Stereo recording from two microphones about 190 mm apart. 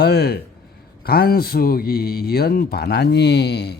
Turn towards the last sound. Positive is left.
turn(degrees=60)  # may be behind; listen again after turning